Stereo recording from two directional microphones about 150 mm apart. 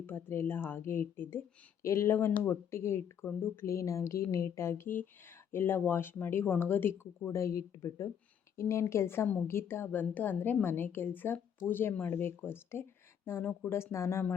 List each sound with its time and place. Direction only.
0.0 s a woman's voice: 15° left (ahead or behind)